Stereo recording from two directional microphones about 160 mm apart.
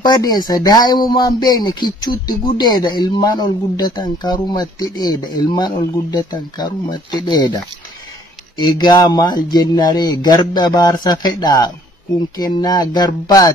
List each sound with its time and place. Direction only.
0.0 s speech: 25° left (ahead or behind)